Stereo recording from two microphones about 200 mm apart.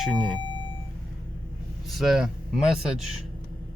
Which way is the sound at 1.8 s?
Centre (ahead or behind).